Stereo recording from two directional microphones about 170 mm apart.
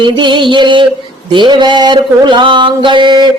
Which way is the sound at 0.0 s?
25° right (ahead or behind).